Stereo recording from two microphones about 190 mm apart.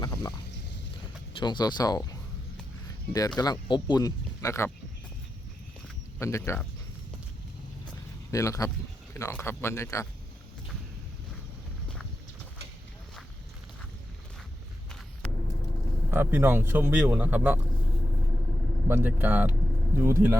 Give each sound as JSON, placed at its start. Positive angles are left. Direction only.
{"t": 0.0, "sound": "a sound", "side_deg": 20}
{"t": 1.4, "sound": "speech", "side_deg": 20}
{"t": 6.1, "sound": "speech", "side_deg": 15}
{"t": 8.3, "sound": "speech", "side_deg": 15}
{"t": 16.1, "sound": "speech", "side_deg": -10}
{"t": 18.9, "sound": "speech", "side_deg": -10}